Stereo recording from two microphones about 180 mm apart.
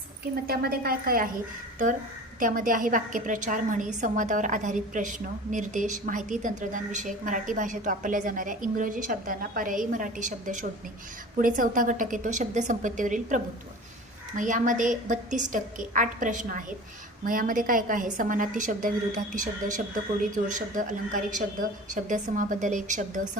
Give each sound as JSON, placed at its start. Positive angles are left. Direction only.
{"t": 0.4, "sound": "a woman's voice", "side_deg": -55}
{"t": 2.4, "sound": "a woman's voice", "side_deg": -50}